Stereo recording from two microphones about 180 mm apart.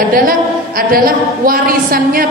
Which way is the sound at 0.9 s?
50° right (ahead or behind).